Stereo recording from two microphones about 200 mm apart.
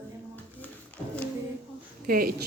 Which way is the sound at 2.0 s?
45° right (ahead or behind).